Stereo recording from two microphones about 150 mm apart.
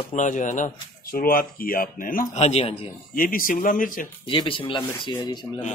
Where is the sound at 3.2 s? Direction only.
70° left (ahead or behind).